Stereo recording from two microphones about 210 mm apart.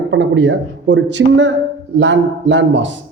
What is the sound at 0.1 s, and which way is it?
A man's voice, 60° right (ahead or behind).